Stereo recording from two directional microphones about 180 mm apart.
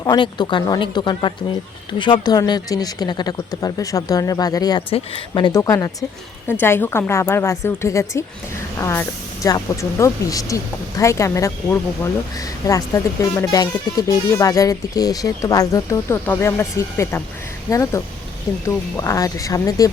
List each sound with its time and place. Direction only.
0.0 s speech: 25° left (ahead or behind)